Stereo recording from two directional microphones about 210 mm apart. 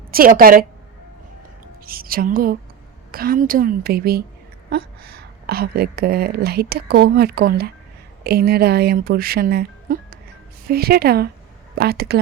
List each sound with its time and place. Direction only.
0.1 s speech: 45° right (ahead or behind)
1.9 s speech: 45° right (ahead or behind)